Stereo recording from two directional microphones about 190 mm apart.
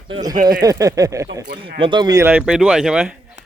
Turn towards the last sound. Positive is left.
turn(degrees=-5)  # may be behind; listen again after turning